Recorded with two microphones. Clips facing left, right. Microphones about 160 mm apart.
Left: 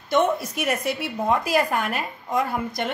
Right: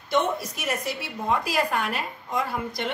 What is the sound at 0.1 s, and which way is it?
A woman's voice, 55° left (ahead or behind).